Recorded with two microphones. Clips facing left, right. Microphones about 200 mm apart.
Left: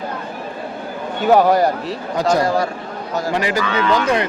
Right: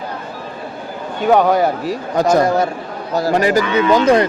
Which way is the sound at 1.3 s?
Centre (ahead or behind).